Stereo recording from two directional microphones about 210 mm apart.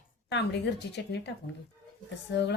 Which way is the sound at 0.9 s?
55° left (ahead or behind).